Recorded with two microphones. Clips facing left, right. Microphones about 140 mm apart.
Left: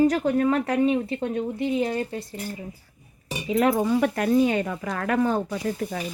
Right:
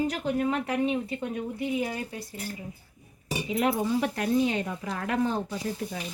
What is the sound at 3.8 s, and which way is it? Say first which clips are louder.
Speech: left 5 dB; 65° left (ahead or behind).